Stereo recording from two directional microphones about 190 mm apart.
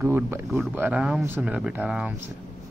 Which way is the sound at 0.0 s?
10° right (ahead or behind).